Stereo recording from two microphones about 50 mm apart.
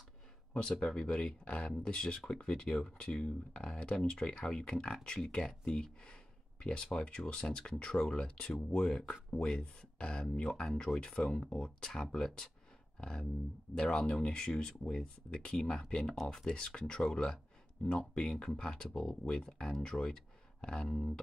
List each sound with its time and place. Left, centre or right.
0.5 s speech: centre
13.7 s speech: centre